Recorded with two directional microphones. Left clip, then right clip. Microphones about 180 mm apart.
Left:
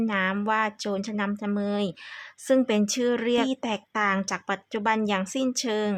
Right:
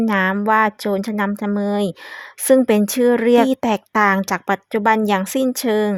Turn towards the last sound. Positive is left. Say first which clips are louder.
# right 8 dB
turn(degrees=-40)  # may be behind; listen again after turning